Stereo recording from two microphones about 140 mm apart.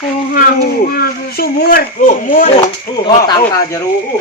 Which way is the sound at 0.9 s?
90° left.